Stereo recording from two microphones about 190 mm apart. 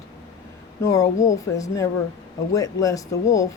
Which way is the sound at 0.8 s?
15° left (ahead or behind).